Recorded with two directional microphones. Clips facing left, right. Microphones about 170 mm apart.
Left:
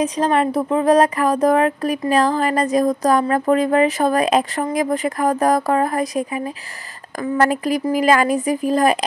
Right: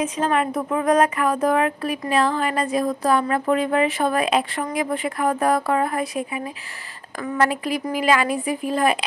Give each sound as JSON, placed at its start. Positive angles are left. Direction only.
{"t": 0.0, "sound": "speech", "side_deg": 35}